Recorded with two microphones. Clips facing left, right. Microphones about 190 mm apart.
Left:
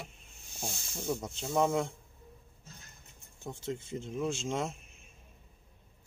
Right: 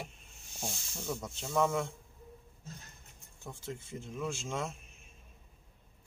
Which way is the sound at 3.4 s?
20° left (ahead or behind).